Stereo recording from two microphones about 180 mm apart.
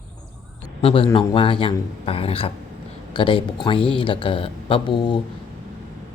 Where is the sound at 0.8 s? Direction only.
30° left (ahead or behind).